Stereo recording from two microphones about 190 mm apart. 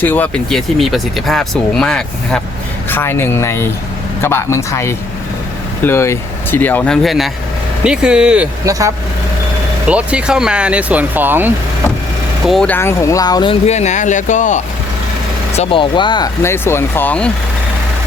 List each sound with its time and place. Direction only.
0.0 s speech: 10° left (ahead or behind)
9.8 s speech: 5° right (ahead or behind)
12.5 s speech: 5° left (ahead or behind); by 14.6 s 40° left (ahead or behind)
15.5 s speech: 25° left (ahead or behind); by 17.3 s 5° left (ahead or behind)